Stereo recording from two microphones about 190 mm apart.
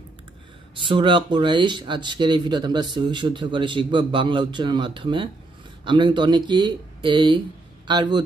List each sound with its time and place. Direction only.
0.8 s speech: 25° right (ahead or behind)